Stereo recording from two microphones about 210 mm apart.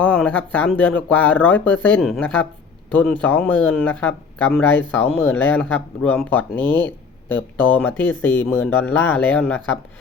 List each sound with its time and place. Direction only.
0.0 s speech: 5° left (ahead or behind)